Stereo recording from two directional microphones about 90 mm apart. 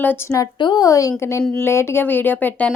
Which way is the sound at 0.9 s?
40° left (ahead or behind).